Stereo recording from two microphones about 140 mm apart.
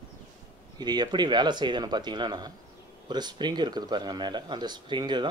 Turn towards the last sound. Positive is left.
turn(degrees=-30)  # may be behind; listen again after turning